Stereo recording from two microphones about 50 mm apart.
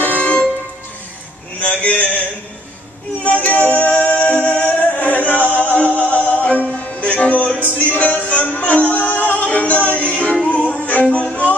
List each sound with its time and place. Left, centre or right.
0.0 s music: left
1.6 s a man's voice: left
3.2 s singing: left
9.3 s music: left